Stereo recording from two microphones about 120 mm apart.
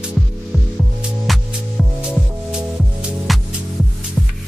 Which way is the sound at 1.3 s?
Centre (ahead or behind).